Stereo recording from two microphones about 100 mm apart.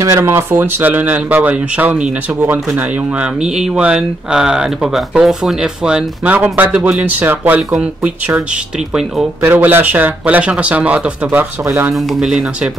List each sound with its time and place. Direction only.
0.0 s speech: 25° right (ahead or behind)
3.4 s speech: 5° right (ahead or behind)
9.4 s speech: 20° right (ahead or behind)
11.9 s speech: 5° right (ahead or behind)